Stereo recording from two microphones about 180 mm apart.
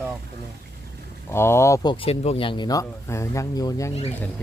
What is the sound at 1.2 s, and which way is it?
Speech, 15° left (ahead or behind).